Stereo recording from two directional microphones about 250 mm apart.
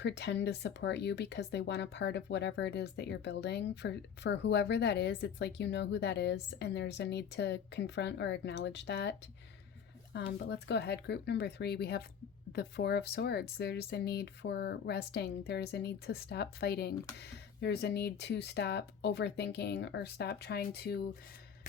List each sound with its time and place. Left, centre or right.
0.0 s speech: left